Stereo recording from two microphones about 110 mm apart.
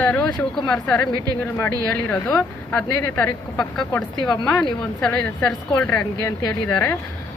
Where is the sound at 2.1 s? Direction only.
15° left (ahead or behind).